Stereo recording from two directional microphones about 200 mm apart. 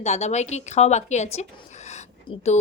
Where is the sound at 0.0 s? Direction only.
35° left (ahead or behind).